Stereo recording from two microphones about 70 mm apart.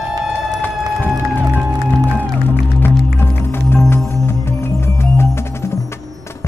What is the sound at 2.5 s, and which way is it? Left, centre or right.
Music, left.